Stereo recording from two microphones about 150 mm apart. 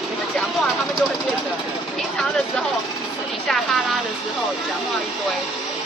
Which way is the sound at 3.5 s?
Centre (ahead or behind).